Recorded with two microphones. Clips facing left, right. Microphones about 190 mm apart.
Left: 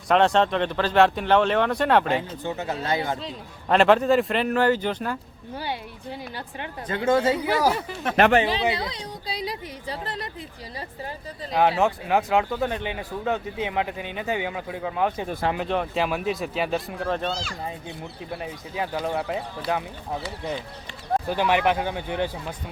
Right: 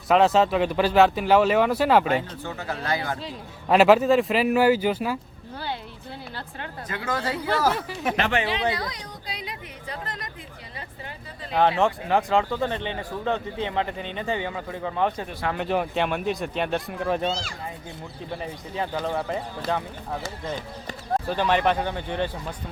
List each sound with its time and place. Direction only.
0.1 s speech: 5° right (ahead or behind)
2.1 s speech: 20° left (ahead or behind)
3.2 s speech: 5° right (ahead or behind)
5.5 s speech: 15° left (ahead or behind)
6.8 s speech: 25° left (ahead or behind)
7.4 s speech: 10° left (ahead or behind)
7.7 s speech: centre (ahead or behind)
8.1 s a woman's voice: 45° left (ahead or behind)
11.8 s speech: 5° left (ahead or behind)
17.1 s speech: 15° right (ahead or behind)
18.3 s speech: 5° left (ahead or behind)
21.2 s speech: 10° left (ahead or behind)